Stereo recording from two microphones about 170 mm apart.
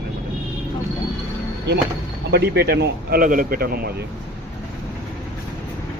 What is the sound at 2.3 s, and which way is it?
Speech, 70° right (ahead or behind).